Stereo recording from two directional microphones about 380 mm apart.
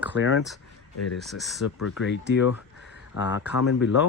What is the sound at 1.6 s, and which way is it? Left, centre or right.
Speech, left.